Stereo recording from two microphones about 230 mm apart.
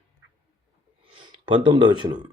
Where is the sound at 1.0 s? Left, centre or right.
Right.